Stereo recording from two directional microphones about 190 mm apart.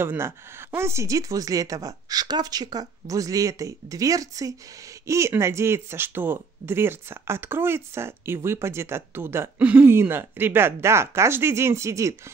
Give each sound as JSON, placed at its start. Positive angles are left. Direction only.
{"t": 0.0, "sound": "speech", "side_deg": -10}